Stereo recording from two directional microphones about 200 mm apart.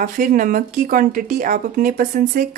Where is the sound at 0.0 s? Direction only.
45° right (ahead or behind).